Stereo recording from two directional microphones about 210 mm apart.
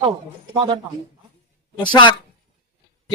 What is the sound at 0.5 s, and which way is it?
Speech, 25° right (ahead or behind).